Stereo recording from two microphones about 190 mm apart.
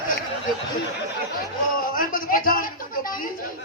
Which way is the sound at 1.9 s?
50° left (ahead or behind).